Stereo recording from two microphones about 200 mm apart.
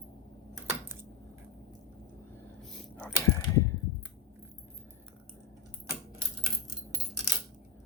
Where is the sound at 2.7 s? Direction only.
5° left (ahead or behind).